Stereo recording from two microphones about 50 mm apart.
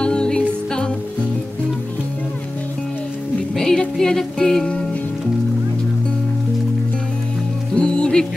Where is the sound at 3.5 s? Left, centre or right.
Centre.